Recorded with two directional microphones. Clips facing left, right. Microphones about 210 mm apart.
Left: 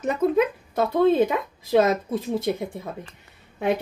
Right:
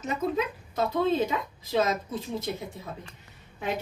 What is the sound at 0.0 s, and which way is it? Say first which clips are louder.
A woman's voice: left 8 dB; 55° left (ahead or behind).